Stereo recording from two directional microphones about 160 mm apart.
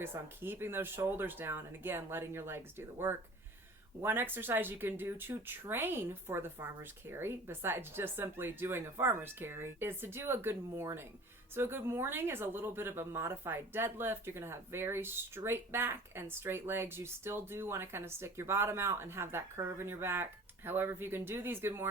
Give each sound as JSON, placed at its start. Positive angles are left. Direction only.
{"t": 0.0, "sound": "speech", "side_deg": -15}